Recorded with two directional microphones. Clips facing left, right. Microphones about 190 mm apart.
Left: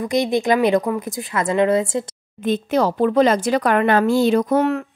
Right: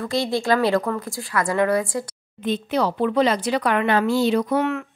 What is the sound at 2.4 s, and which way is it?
Speech, 45° left (ahead or behind).